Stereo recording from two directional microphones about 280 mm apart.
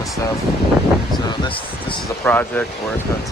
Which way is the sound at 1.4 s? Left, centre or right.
Centre.